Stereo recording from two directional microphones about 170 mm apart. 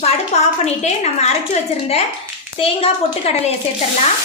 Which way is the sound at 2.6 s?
35° left (ahead or behind).